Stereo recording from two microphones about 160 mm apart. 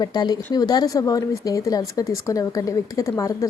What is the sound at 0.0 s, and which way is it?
Speech, 25° left (ahead or behind).